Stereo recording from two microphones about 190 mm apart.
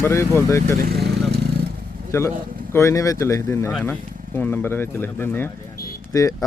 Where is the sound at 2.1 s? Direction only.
15° left (ahead or behind).